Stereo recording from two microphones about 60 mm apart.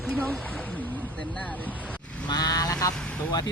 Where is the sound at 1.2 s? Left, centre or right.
Left.